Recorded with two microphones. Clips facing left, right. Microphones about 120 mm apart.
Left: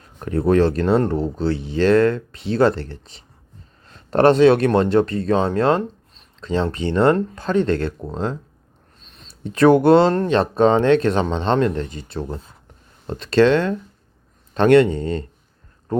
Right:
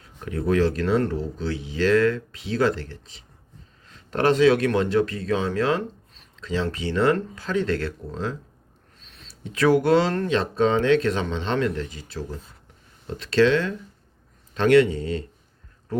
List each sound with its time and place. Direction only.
0.2 s speech: 40° left (ahead or behind)
3.8 s a sound: 40° left (ahead or behind)
4.3 s speech: 30° left (ahead or behind)
10.3 s speech: 60° left (ahead or behind)
11.0 s speech: 30° left (ahead or behind)
13.1 s speech: 60° left (ahead or behind)